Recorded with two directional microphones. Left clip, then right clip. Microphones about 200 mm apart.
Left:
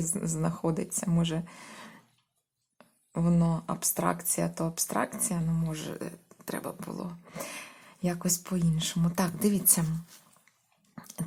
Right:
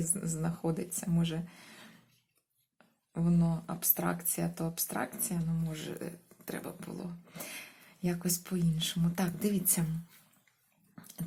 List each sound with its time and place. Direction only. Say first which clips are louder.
0.0 s speech: left 5 dB; 35° left (ahead or behind)
10.9 s dog: left 6 dB; 35° left (ahead or behind)